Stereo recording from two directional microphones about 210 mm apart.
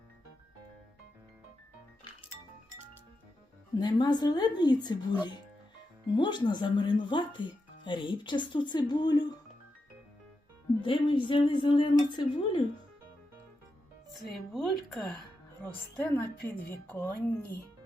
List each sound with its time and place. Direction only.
3.8 s speech: 20° left (ahead or behind)
10.8 s speech: 25° left (ahead or behind)
14.3 s speech: centre (ahead or behind)